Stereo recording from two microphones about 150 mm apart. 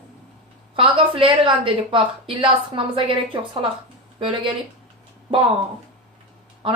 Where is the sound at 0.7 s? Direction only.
35° right (ahead or behind).